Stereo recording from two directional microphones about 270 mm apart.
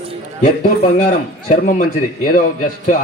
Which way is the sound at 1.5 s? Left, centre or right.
Left.